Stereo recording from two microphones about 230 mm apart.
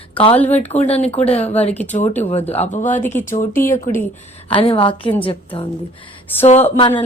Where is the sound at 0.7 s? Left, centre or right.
Left.